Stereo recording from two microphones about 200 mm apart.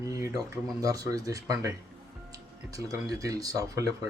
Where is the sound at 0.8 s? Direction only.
15° right (ahead or behind).